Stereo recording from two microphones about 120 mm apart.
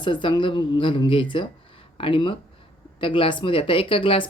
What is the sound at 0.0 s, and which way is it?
Speech, 40° left (ahead or behind).